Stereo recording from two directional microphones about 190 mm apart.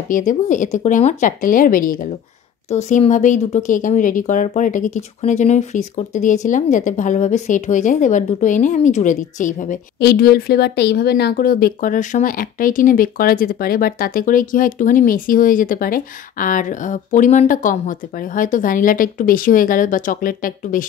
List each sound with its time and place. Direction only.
0.1 s speech: 45° left (ahead or behind)
2.7 s speech: 35° left (ahead or behind)